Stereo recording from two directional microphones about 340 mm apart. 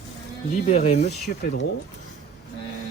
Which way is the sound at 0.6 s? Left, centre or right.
Centre.